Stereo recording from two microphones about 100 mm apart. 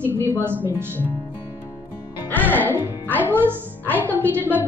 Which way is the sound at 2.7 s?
15° left (ahead or behind).